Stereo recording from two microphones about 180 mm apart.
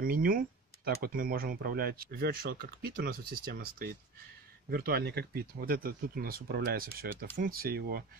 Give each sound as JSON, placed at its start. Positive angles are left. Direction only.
{"t": 0.0, "sound": "speech", "side_deg": -55}